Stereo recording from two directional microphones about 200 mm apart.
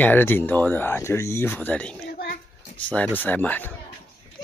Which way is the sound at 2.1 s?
45° left (ahead or behind).